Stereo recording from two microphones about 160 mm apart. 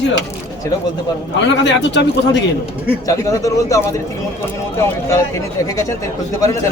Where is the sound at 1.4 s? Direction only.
90° left.